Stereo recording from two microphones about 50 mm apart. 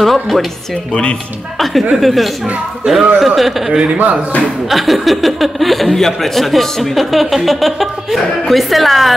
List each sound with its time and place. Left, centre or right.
0.0 s speech: centre
1.6 s speech: centre
2.8 s a man's voice: centre
3.2 s speech: centre